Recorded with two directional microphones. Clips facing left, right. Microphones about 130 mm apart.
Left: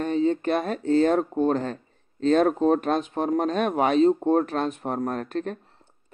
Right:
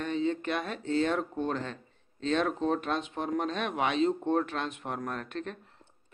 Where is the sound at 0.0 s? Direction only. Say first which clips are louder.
Left 7 dB; 40° left (ahead or behind).